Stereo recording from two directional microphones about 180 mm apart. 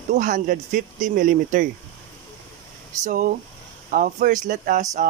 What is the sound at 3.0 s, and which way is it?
Speech, 50° right (ahead or behind).